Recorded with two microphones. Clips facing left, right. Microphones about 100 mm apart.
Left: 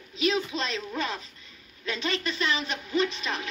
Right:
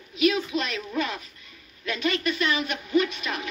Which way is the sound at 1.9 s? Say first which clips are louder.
Right 4 dB; 30° left (ahead or behind).